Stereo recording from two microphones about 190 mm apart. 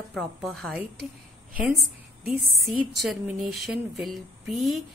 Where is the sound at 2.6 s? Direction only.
Centre (ahead or behind).